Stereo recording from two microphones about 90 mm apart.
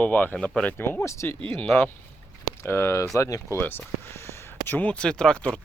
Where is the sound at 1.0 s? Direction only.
30° left (ahead or behind).